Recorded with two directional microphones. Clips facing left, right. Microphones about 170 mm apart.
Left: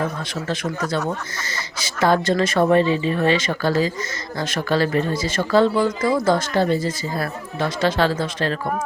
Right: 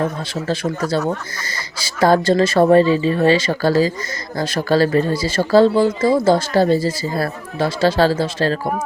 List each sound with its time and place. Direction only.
0.4 s speech: 30° right (ahead or behind)